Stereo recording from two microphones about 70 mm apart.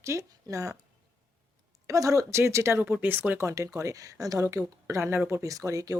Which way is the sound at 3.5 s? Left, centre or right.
Right.